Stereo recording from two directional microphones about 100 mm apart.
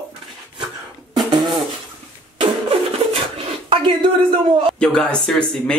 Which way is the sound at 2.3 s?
65° right (ahead or behind).